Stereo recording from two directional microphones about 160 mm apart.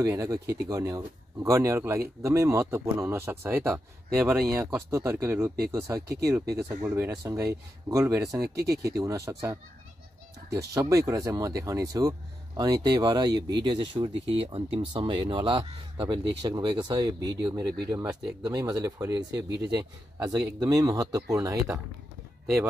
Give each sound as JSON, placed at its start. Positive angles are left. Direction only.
{"t": 0.0, "sound": "speech", "side_deg": -20}
{"t": 10.5, "sound": "speech", "side_deg": -20}